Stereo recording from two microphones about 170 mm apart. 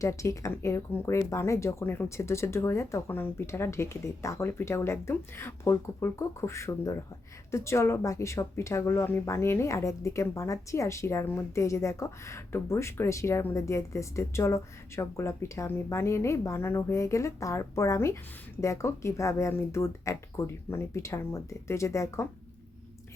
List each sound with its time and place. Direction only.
0.0 s speech: 20° left (ahead or behind)